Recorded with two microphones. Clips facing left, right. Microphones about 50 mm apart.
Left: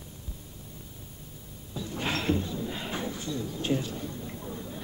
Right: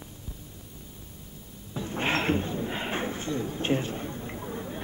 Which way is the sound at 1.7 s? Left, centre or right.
Right.